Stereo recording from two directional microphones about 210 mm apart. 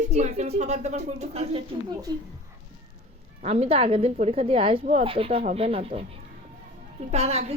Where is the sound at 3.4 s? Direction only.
30° right (ahead or behind).